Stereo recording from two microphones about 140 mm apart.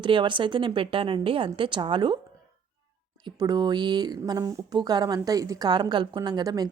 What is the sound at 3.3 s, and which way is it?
Speech, 30° right (ahead or behind).